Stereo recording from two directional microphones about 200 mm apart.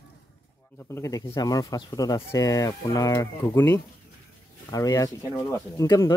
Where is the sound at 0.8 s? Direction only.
15° left (ahead or behind).